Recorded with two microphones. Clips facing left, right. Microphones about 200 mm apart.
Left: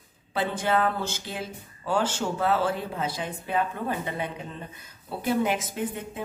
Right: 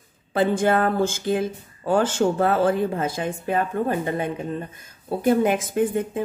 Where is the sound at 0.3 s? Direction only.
50° right (ahead or behind).